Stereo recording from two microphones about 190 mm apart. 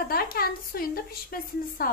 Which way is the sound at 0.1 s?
50° left (ahead or behind).